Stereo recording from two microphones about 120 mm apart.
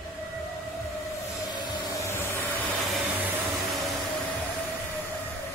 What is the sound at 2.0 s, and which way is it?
Vehicle, 20° left (ahead or behind).